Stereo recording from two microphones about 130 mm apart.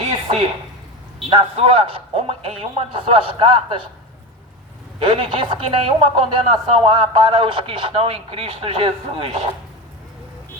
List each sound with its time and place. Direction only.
1.3 s speech: 45° right (ahead or behind)
4.9 s speech: 45° right (ahead or behind)